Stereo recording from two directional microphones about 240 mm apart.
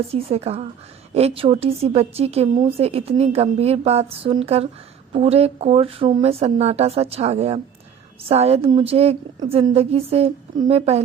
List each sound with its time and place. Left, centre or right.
0.1 s a woman's voice: right